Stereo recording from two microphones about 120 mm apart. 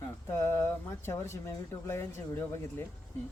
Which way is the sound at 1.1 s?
20° left (ahead or behind).